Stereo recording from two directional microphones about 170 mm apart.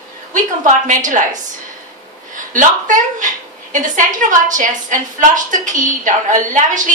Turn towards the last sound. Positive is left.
turn(degrees=-50)  # may be behind; listen again after turning